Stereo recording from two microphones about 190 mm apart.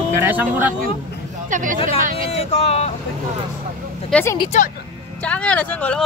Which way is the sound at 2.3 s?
30° left (ahead or behind).